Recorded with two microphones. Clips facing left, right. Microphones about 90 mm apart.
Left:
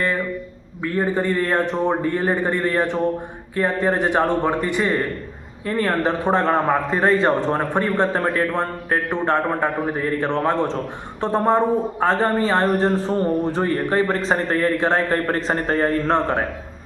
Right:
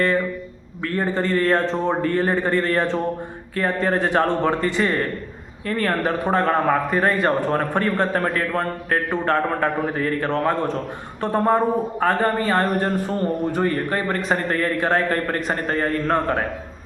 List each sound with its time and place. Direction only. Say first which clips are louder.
0.8 s a man's voice: left 1 dB; 15° left (ahead or behind)